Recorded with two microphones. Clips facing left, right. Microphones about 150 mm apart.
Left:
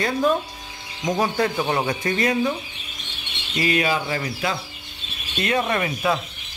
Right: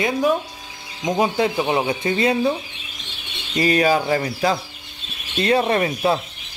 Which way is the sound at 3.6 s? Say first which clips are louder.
Right 4 dB; 35° right (ahead or behind).